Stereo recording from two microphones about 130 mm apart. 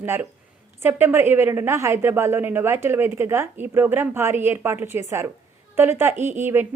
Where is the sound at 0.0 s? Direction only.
15° right (ahead or behind).